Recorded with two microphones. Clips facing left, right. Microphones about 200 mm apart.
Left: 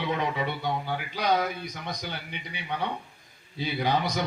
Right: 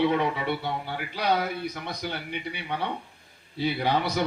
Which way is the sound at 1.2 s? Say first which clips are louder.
Right 1 dB; 60° right (ahead or behind).